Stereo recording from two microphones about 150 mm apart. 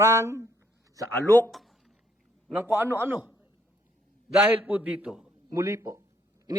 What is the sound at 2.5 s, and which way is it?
Speech, 10° right (ahead or behind).